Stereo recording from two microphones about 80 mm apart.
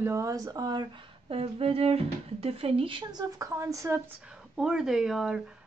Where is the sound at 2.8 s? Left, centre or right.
Right.